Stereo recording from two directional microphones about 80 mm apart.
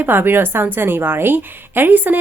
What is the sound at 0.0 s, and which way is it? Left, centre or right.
Speech, right.